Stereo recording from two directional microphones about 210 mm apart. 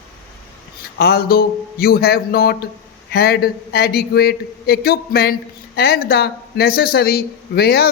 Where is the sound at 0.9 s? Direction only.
45° left (ahead or behind).